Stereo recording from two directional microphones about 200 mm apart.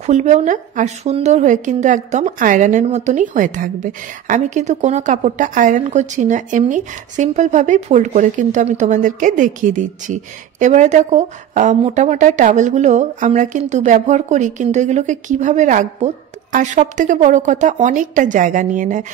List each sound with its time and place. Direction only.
0.0 s a woman's voice: 35° right (ahead or behind)